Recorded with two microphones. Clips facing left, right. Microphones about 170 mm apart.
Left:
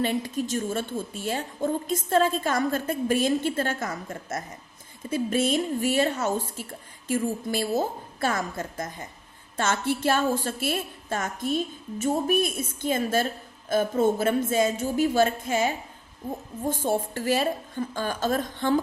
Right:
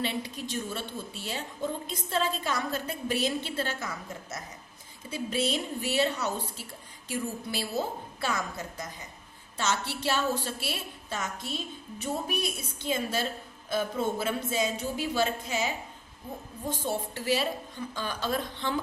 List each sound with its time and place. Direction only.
0.0 s a woman's voice: 45° left (ahead or behind)